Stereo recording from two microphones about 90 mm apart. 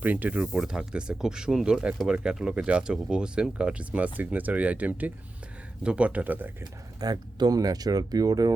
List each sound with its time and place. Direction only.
0.0 s speech: 20° right (ahead or behind)
7.0 s speech: 45° right (ahead or behind)